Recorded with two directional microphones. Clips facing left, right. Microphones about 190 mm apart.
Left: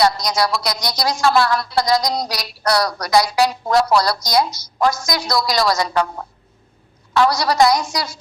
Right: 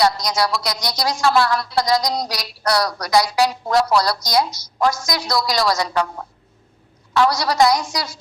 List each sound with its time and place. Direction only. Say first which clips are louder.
0.0 s speech: left 1 dB; 55° left (ahead or behind)
7.1 s a woman's voice: left 1 dB; 55° left (ahead or behind)